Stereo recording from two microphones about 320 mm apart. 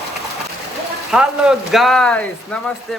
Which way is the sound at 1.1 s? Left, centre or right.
Centre.